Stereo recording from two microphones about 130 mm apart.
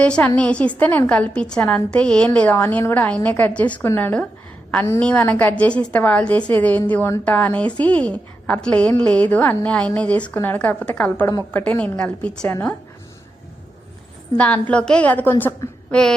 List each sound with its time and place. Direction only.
0.0 s a woman's voice: 10° left (ahead or behind)
14.3 s a woman's voice: 10° left (ahead or behind)